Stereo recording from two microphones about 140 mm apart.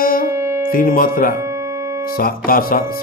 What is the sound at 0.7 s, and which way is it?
Speech, 90° left.